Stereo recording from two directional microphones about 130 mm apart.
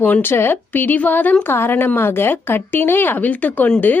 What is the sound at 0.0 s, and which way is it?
A woman's voice, 15° left (ahead or behind).